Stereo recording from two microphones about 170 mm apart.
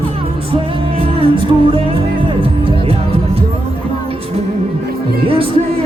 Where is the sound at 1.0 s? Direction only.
35° right (ahead or behind).